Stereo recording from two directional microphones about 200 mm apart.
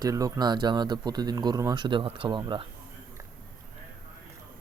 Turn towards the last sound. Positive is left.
turn(degrees=-25)  # may be behind; listen again after turning